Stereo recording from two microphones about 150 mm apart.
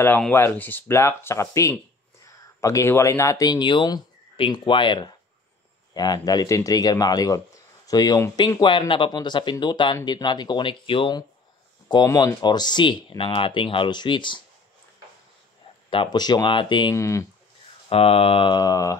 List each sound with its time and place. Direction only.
0.3 s a man's voice: 15° left (ahead or behind); by 14.4 s 30° left (ahead or behind)
15.9 s speech: 30° left (ahead or behind)
16.9 s a man's voice: 20° left (ahead or behind)
17.8 s speech: 40° left (ahead or behind); by 18.9 s 25° left (ahead or behind)